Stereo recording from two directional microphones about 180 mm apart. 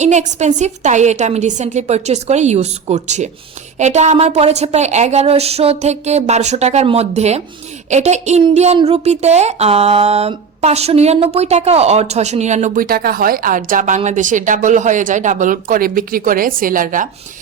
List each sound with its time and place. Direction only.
0.0 s a woman's voice: 40° right (ahead or behind)